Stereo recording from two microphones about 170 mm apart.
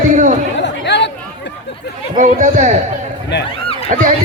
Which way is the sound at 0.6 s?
90° left.